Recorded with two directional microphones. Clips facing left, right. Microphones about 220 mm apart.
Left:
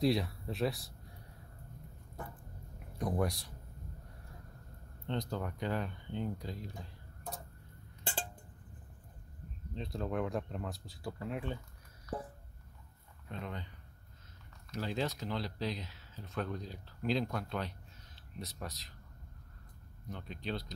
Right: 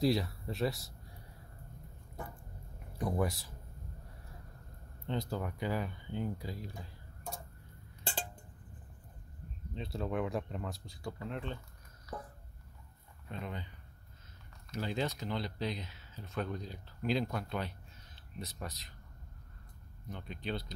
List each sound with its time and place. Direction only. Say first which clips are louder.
0.0 s speech: even; centre (ahead or behind)
3.2 s speech: even; centre (ahead or behind)
5.0 s speech: right 1 dB; 5° right (ahead or behind)
9.8 s speech: even; 5° right (ahead or behind)
13.3 s speech: right 1 dB; 5° right (ahead or behind)
14.7 s speech: even; centre (ahead or behind)
20.1 s speech: even; centre (ahead or behind)